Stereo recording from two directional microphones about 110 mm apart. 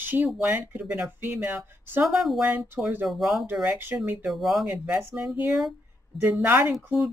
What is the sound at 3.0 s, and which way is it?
Speech, centre (ahead or behind).